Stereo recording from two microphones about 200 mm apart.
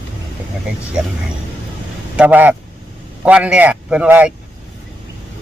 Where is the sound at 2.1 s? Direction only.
10° right (ahead or behind).